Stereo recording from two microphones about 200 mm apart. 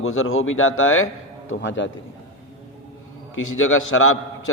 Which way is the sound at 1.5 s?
65° left (ahead or behind).